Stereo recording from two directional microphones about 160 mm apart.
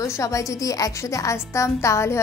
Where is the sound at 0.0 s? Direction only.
20° left (ahead or behind).